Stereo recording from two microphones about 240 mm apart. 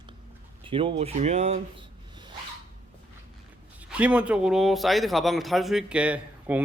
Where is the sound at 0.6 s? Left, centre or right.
Right.